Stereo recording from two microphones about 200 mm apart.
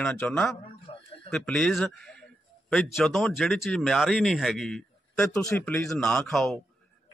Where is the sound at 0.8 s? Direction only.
30° left (ahead or behind).